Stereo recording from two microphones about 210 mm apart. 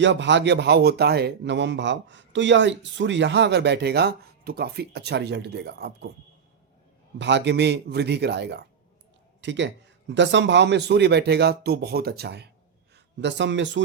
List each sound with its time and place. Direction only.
0.0 s a man's voice: 60° right (ahead or behind)
7.2 s a man's voice: 55° right (ahead or behind)